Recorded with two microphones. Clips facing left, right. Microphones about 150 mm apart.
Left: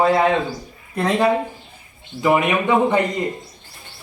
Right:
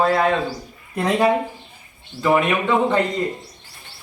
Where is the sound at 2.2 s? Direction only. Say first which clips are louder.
Left 1 dB; 15° left (ahead or behind).